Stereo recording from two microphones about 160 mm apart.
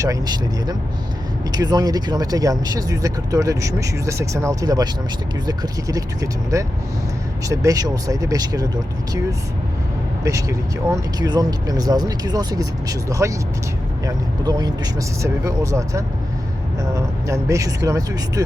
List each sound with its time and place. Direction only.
0.0 s speech: 25° right (ahead or behind)
6.5 s speech: 20° right (ahead or behind)
10.2 s speech: 20° right (ahead or behind)